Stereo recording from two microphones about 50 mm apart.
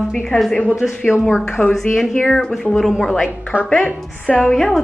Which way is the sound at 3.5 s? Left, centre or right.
Right.